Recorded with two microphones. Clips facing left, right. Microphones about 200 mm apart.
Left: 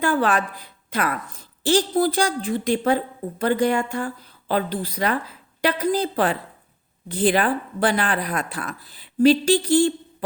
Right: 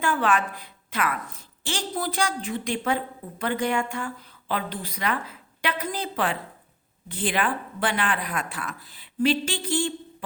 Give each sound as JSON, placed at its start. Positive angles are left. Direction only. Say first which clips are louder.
{"t": 0.0, "sound": "a woman's voice", "louder": "left 3 dB", "side_deg": 35}